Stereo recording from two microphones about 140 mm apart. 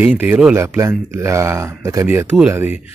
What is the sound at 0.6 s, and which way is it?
Speech, 20° right (ahead or behind).